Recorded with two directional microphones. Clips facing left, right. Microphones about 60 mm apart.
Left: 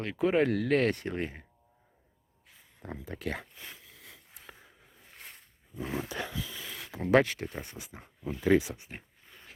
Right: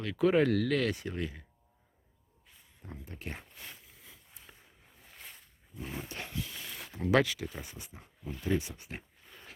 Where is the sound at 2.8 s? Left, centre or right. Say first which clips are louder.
Left 7 dB; left.